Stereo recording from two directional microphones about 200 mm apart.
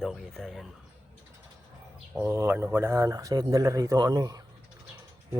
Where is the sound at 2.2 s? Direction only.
10° right (ahead or behind).